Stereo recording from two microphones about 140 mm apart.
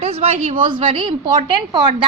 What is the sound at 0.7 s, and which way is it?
A woman's voice, 40° right (ahead or behind).